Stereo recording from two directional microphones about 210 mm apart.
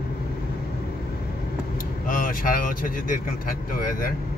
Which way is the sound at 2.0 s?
40° left (ahead or behind).